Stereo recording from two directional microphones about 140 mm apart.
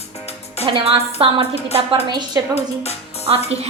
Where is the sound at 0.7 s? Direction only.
40° right (ahead or behind).